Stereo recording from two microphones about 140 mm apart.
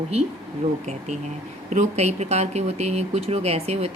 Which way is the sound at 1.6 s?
55° right (ahead or behind).